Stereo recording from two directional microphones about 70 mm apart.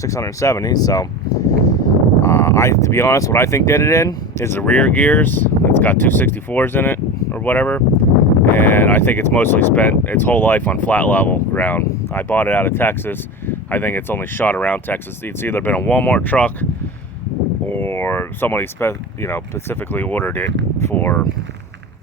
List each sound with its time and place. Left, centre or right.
0.0 s speech: left
0.7 s speech: left
4.6 s speech: left
17.7 s speech: left